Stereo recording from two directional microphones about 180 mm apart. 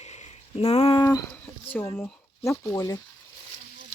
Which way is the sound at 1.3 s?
10° left (ahead or behind).